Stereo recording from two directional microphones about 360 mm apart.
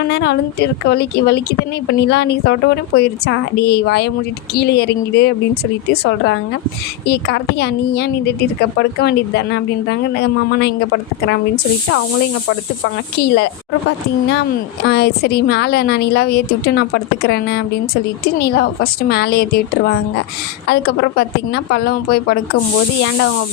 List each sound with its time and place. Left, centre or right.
0.1 s speech: left
14.8 s speech: left